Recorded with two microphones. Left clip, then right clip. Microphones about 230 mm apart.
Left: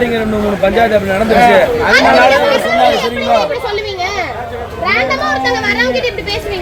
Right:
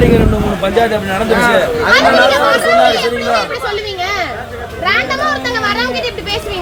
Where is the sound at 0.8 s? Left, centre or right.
Right.